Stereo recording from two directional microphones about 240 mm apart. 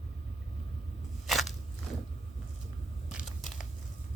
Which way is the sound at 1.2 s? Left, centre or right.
Centre.